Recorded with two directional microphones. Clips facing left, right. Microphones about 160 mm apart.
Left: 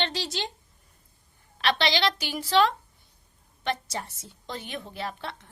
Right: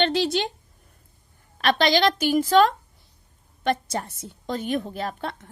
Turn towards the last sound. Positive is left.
turn(degrees=-45)  # may be behind; listen again after turning